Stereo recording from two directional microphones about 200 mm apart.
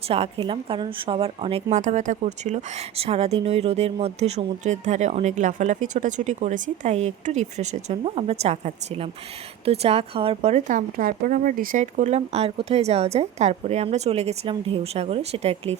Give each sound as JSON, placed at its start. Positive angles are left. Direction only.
{"t": 0.1, "sound": "a woman's voice", "side_deg": -30}